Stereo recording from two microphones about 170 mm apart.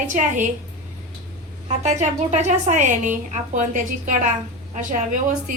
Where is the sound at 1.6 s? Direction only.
45° right (ahead or behind).